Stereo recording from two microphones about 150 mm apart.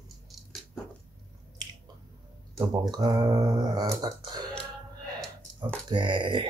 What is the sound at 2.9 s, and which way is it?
Speech, 25° right (ahead or behind).